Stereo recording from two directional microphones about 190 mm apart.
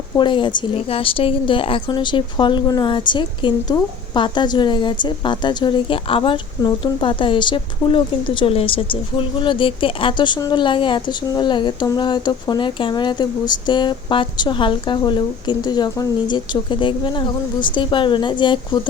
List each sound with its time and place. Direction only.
0.2 s a woman's voice: 25° left (ahead or behind)